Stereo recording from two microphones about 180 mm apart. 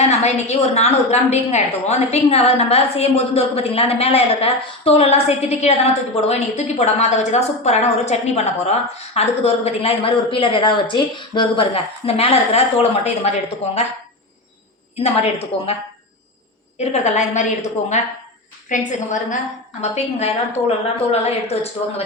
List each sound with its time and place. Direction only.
0.0 s a woman's voice: 40° left (ahead or behind)
14.9 s a woman's voice: 35° left (ahead or behind)
16.7 s a woman's voice: 35° left (ahead or behind)